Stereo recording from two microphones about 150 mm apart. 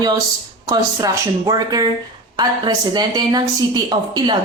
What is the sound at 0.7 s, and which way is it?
A woman's voice, 25° right (ahead or behind).